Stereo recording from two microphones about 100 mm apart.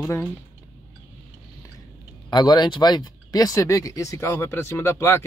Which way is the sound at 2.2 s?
50° left (ahead or behind).